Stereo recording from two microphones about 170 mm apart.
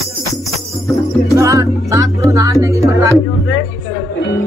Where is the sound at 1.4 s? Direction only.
20° right (ahead or behind).